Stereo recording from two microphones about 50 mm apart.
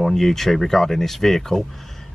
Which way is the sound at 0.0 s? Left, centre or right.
Centre.